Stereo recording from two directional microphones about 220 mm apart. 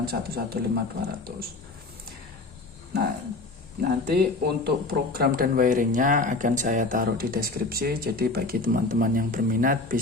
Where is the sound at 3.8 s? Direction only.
45° right (ahead or behind).